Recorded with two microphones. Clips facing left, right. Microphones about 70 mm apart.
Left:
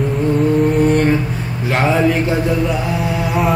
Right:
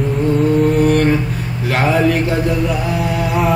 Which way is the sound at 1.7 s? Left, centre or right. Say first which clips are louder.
Even; centre.